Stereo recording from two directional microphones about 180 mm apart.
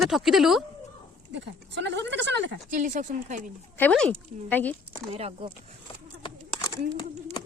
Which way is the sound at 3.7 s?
5° left (ahead or behind).